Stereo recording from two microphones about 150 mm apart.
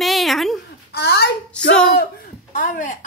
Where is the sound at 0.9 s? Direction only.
90° left.